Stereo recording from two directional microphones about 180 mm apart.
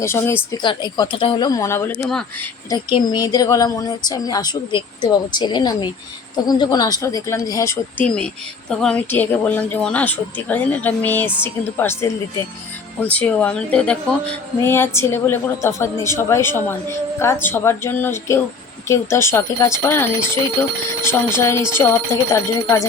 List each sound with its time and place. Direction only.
0.0 s a woman's voice: 15° left (ahead or behind)
0.5 s a woman's voice: 25° left (ahead or behind); by 2.5 s 5° left (ahead or behind)
2.6 s a woman's voice: 25° left (ahead or behind)